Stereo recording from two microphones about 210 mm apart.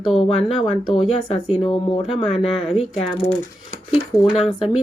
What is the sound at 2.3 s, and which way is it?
Speech, centre (ahead or behind).